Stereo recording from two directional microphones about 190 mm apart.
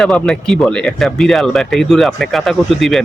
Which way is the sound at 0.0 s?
5° left (ahead or behind).